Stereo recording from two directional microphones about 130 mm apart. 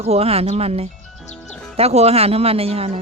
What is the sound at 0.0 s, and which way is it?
Speech, 50° right (ahead or behind).